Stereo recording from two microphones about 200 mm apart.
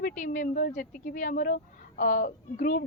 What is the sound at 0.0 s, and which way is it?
A woman's voice, 40° left (ahead or behind).